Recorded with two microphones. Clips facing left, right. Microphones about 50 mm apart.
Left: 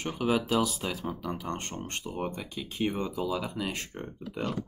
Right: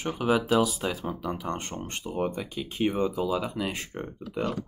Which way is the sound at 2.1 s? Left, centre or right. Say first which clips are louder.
Right 7 dB; centre.